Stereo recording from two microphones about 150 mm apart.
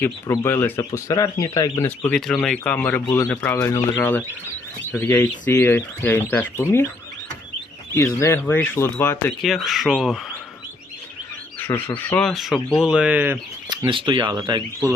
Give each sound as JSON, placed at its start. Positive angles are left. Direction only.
{"t": 0.0, "sound": "speech", "side_deg": 15}
{"t": 2.0, "sound": "speech", "side_deg": 5}
{"t": 7.9, "sound": "speech", "side_deg": 15}
{"t": 9.4, "sound": "speech", "side_deg": 0}
{"t": 11.6, "sound": "speech", "side_deg": 15}
{"t": 12.3, "sound": "speech", "side_deg": 0}
{"t": 13.9, "sound": "speech", "side_deg": -35}